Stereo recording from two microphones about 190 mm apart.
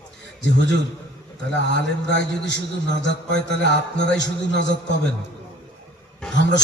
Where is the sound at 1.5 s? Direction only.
70° left (ahead or behind).